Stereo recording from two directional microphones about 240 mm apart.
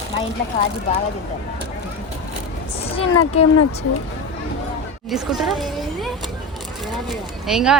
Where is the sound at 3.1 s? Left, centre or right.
Left.